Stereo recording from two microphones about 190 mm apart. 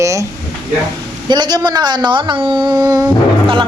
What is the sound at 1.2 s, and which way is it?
Speech, 20° right (ahead or behind).